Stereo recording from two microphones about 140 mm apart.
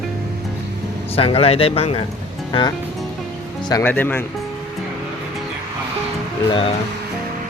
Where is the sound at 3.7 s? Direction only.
15° left (ahead or behind).